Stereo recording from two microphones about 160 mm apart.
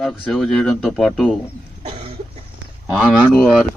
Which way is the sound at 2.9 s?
5° left (ahead or behind).